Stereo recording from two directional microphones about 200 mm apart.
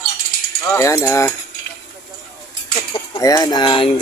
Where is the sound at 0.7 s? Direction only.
15° left (ahead or behind).